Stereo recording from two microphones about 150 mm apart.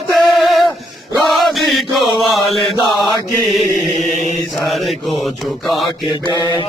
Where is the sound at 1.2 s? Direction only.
Centre (ahead or behind).